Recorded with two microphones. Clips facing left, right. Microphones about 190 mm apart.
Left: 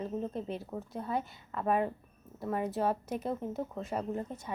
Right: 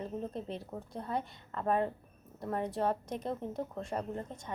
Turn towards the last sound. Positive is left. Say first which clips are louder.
# left 3 dB
turn(degrees=5)  # may be behind; listen again after turning